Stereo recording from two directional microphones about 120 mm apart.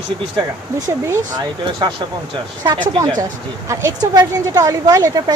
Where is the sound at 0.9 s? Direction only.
25° right (ahead or behind).